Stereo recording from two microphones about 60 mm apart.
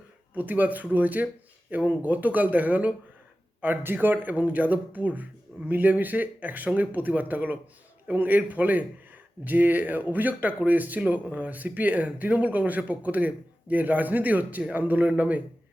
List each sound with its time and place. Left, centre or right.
0.3 s a man's voice: right